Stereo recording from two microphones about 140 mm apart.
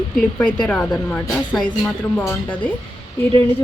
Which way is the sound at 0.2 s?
5° left (ahead or behind).